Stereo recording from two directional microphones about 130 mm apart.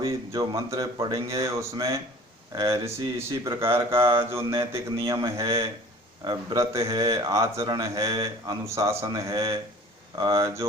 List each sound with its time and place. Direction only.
0.0 s a man's voice: 25° right (ahead or behind)